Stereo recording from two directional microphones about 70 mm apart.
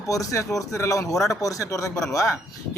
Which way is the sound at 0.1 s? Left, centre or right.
Left.